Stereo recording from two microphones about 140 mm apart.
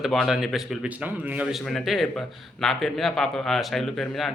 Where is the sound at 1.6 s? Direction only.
Centre (ahead or behind).